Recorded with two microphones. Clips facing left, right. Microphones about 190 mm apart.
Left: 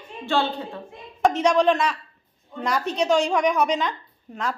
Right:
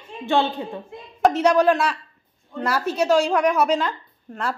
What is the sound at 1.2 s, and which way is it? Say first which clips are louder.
Speech: right 2 dB; 10° right (ahead or behind).